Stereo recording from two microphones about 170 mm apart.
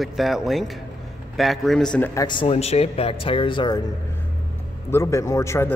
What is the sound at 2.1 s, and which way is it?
Speech, 25° left (ahead or behind).